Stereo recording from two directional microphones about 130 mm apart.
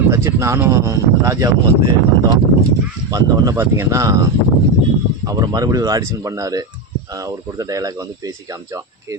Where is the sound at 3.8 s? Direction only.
20° right (ahead or behind).